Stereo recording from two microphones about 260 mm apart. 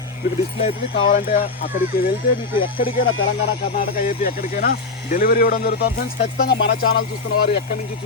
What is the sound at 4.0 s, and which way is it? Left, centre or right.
Speech, left.